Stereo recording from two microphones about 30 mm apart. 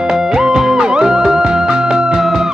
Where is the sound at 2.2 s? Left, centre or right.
Centre.